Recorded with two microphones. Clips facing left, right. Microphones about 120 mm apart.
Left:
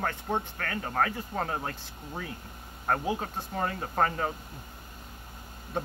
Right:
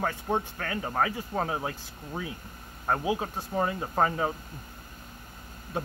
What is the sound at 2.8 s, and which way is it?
Speech, 5° right (ahead or behind).